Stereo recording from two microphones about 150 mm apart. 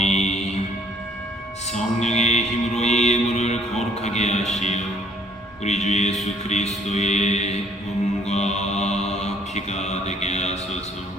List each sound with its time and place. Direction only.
0.0 s music: 50° left (ahead or behind)
1.7 s mantra: 50° left (ahead or behind)
5.6 s music: 50° left (ahead or behind)
8.3 s mantra: 50° left (ahead or behind)